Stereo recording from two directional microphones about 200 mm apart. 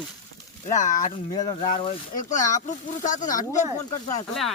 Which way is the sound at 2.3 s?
40° left (ahead or behind).